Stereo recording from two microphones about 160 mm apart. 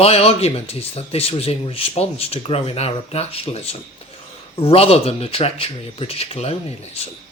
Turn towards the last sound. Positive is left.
turn(degrees=40)  # may be behind; listen again after turning